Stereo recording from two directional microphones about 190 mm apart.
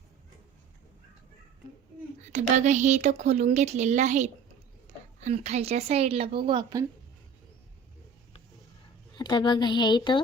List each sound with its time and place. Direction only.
2.3 s a woman's voice: 40° right (ahead or behind)
4.9 s a sound: 35° right (ahead or behind)
5.2 s a woman's voice: 35° right (ahead or behind)
9.1 s speech: 25° left (ahead or behind)